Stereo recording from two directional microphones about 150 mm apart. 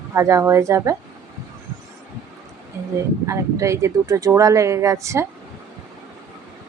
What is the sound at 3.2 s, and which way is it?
Speech, 20° right (ahead or behind).